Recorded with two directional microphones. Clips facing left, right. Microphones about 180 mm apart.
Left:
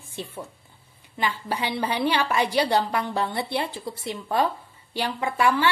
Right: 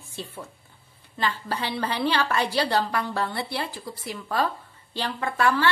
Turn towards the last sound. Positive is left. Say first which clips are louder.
# left 1 dB
turn(degrees=15)  # may be behind; listen again after turning